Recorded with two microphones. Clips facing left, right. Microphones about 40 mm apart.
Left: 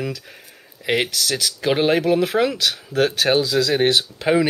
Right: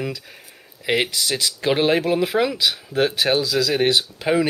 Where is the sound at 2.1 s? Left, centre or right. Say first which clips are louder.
Left 1 dB; centre.